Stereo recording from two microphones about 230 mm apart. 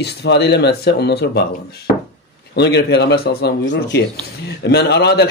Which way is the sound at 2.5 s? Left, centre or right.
Left.